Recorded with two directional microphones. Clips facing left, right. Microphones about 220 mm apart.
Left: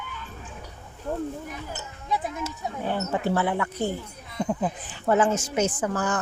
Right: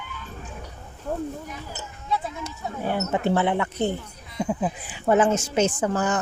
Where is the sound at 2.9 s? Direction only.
20° right (ahead or behind).